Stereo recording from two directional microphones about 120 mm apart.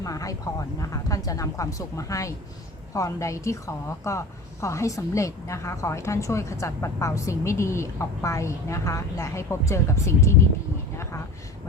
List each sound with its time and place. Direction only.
0.0 s a sound: 30° left (ahead or behind)
0.8 s a woman's voice: 30° left (ahead or behind)
10.9 s vehicle: 20° left (ahead or behind)